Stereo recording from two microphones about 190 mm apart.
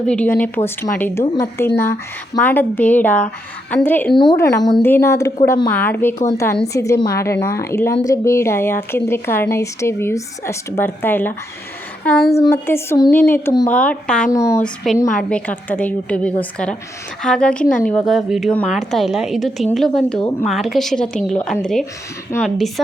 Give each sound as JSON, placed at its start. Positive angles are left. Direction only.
{"t": 0.0, "sound": "a woman's voice", "side_deg": 5}
{"t": 4.1, "sound": "a woman's voice", "side_deg": 25}
{"t": 12.5, "sound": "a woman's voice", "side_deg": 15}